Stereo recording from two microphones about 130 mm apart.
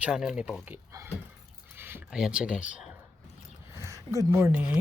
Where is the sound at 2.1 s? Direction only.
5° right (ahead or behind).